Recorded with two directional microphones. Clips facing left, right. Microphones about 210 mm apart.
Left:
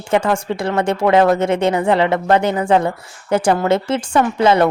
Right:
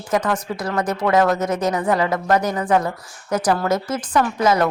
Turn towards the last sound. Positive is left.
turn(degrees=30)  # may be behind; listen again after turning